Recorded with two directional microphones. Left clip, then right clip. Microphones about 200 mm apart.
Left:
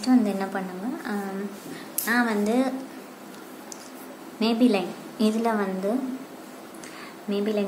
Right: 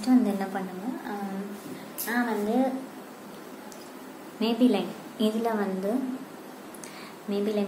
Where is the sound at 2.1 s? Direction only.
25° left (ahead or behind).